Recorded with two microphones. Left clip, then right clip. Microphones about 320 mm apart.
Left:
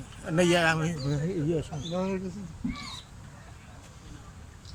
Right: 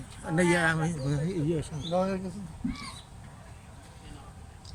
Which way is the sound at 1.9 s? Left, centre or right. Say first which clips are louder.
Right 4 dB; right.